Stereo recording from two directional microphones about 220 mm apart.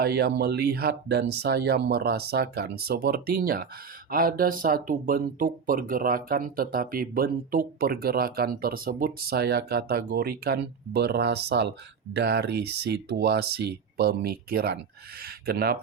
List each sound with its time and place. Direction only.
0.0 s speech: 45° right (ahead or behind)